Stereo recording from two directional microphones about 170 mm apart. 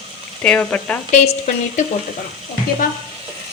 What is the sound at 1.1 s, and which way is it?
Speech, 45° left (ahead or behind).